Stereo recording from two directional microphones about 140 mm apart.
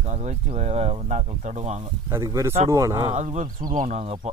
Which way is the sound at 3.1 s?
55° right (ahead or behind).